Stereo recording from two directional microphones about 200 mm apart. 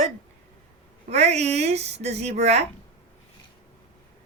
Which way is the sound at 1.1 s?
30° right (ahead or behind).